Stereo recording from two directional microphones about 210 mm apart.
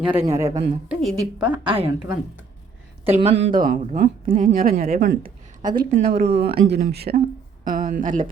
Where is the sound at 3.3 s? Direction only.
50° right (ahead or behind).